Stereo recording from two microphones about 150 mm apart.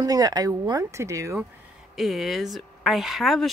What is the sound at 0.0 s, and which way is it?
Speech, 25° right (ahead or behind).